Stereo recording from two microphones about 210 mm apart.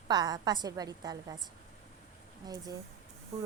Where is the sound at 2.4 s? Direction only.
20° right (ahead or behind).